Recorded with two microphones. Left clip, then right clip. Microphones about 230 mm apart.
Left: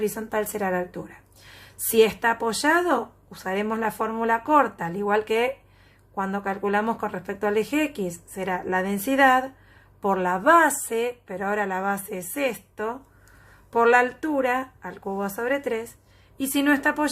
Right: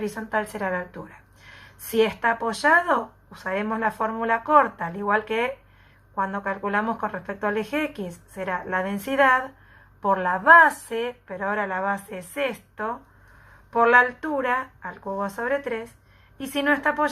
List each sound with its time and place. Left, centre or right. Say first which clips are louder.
0.0 s a woman's voice: left 1 dB; left